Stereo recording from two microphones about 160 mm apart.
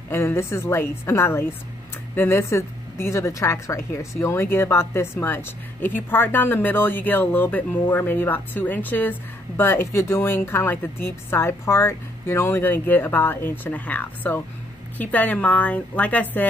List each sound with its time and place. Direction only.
0.1 s a woman's voice: 15° left (ahead or behind)